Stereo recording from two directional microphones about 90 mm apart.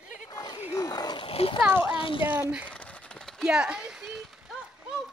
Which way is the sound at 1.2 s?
90° left.